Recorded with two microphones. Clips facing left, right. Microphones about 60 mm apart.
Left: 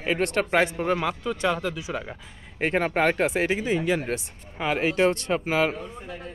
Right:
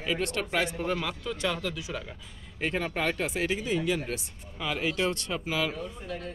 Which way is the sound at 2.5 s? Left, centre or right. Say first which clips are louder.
Left 7 dB; left.